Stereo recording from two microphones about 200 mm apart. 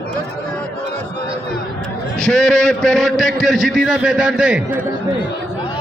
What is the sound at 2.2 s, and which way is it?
A man's voice, 5° left (ahead or behind).